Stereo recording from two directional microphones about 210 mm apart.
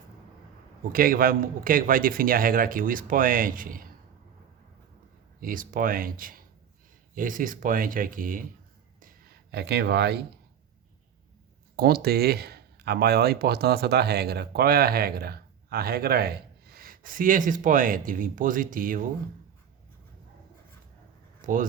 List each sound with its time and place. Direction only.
0.9 s a man's voice: 45° right (ahead or behind)
5.4 s a man's voice: 40° right (ahead or behind)
9.0 s a sound: 45° right (ahead or behind)
11.8 s speech: 45° right (ahead or behind)
21.4 s speech: 40° right (ahead or behind)